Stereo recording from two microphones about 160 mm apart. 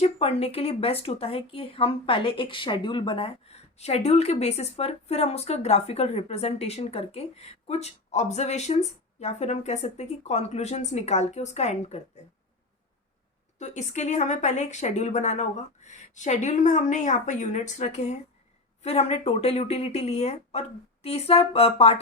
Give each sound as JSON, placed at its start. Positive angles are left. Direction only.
{"t": 0.0, "sound": "a woman's voice", "side_deg": 40}
{"t": 13.6, "sound": "a woman's voice", "side_deg": 45}